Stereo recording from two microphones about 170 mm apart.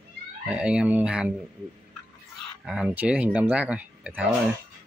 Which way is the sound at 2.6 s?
5° right (ahead or behind).